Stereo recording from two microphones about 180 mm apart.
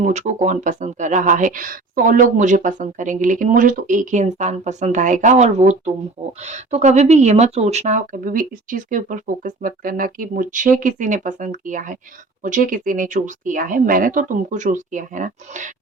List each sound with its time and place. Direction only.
0.0 s speech: 40° right (ahead or behind)